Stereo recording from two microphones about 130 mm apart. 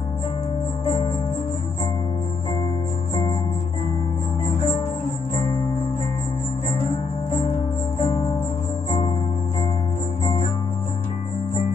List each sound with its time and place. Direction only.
8.0 s music: 35° left (ahead or behind)